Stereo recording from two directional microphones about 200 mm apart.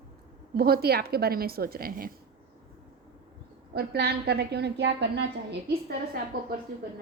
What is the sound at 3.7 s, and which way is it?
A woman's voice, 55° right (ahead or behind).